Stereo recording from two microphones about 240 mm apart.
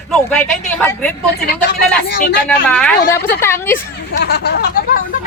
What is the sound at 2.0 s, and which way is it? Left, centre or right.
Speech, left.